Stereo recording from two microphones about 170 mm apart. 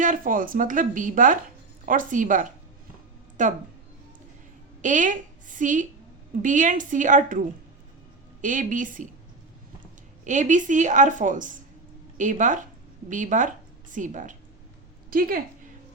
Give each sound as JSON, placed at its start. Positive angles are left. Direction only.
{"t": 0.0, "sound": "a woman's voice", "side_deg": -50}
{"t": 4.8, "sound": "a woman's voice", "side_deg": -50}
{"t": 10.2, "sound": "a woman's voice", "side_deg": -45}